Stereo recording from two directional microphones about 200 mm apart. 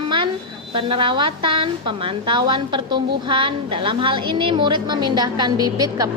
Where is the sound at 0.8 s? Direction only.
25° right (ahead or behind).